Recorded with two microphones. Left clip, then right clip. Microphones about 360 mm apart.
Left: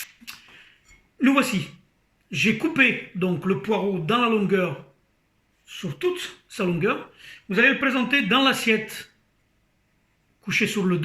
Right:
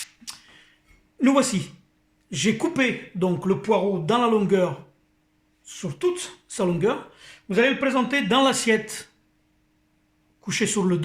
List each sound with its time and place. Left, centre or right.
1.2 s speech: centre
10.4 s speech: centre